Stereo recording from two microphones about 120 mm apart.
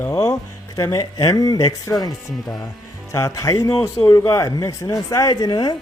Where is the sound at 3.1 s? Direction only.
25° left (ahead or behind).